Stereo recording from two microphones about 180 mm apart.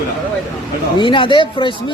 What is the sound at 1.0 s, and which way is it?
Speech, 25° left (ahead or behind).